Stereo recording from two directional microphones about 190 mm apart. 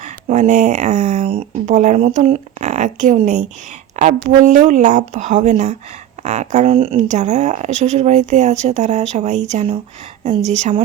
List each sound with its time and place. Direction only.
0.0 s speech: 40° right (ahead or behind)